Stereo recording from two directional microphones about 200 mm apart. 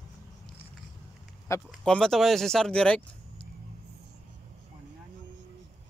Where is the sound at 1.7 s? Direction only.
5° left (ahead or behind).